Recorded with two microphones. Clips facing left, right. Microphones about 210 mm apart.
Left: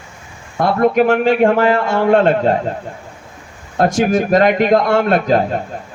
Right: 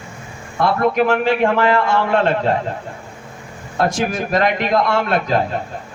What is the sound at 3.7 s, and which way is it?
A man's voice, 45° left (ahead or behind).